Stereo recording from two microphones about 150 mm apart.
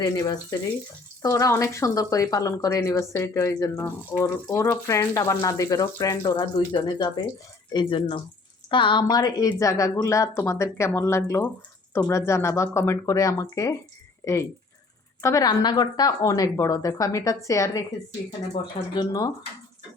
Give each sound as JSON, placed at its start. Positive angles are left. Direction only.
{"t": 0.0, "sound": "speech", "side_deg": 25}